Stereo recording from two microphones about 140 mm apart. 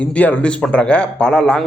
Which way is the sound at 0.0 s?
10° left (ahead or behind).